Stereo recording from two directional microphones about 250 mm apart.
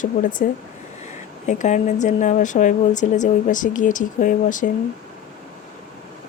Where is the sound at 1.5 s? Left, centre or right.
Left.